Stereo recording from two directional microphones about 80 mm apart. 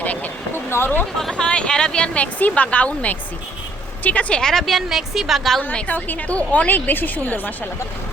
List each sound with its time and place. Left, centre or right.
0.0 s a sound: centre
1.2 s a woman's voice: centre
5.6 s a woman's voice: left